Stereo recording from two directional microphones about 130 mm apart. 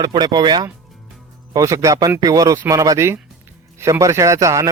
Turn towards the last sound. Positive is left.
turn(degrees=-25)  # may be behind; listen again after turning